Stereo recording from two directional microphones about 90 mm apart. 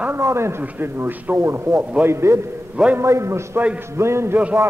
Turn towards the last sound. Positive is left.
turn(degrees=-20)  # may be behind; listen again after turning